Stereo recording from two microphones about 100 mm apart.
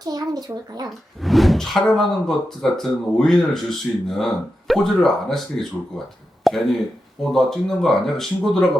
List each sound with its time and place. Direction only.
0.0 s speech: 40° right (ahead or behind)
1.2 s speech: centre (ahead or behind)